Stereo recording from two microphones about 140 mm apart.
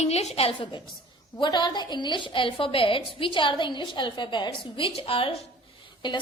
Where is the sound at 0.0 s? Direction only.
50° left (ahead or behind).